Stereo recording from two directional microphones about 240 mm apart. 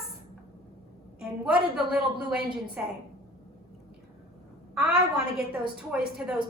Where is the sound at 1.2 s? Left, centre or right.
Centre.